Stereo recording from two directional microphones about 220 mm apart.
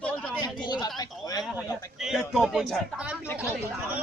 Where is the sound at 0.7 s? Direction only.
20° left (ahead or behind).